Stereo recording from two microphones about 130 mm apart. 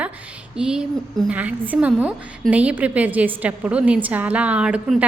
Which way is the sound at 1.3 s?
10° right (ahead or behind).